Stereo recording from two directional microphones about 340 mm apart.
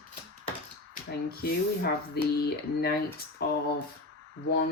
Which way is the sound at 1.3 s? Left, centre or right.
Left.